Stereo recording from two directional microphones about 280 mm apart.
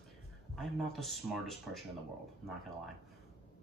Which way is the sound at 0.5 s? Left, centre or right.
Centre.